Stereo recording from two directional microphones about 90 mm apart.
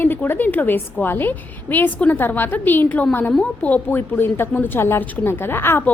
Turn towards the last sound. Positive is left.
turn(degrees=25)  # may be behind; listen again after turning